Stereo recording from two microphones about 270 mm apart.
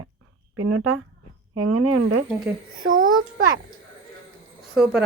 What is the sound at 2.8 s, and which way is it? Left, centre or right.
Speech, right.